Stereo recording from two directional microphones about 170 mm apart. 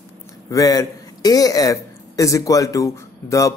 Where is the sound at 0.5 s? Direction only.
20° left (ahead or behind).